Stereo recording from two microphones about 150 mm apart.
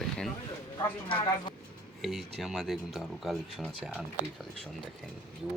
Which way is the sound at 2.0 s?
Centre (ahead or behind).